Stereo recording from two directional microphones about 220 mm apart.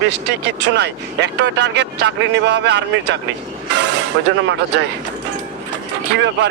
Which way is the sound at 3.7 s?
50° right (ahead or behind).